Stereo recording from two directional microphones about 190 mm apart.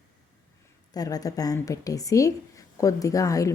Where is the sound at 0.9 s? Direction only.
20° left (ahead or behind).